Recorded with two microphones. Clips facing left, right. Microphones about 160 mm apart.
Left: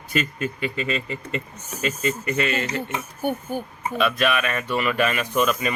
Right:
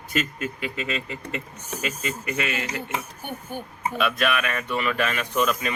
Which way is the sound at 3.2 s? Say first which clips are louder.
Left 8 dB; 45° left (ahead or behind).